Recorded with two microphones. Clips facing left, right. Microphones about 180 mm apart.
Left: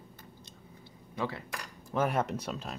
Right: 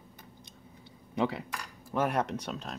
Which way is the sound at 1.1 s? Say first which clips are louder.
Right 5 dB; 20° right (ahead or behind).